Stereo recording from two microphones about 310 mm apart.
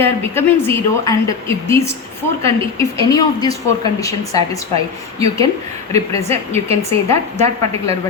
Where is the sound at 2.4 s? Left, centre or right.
Centre.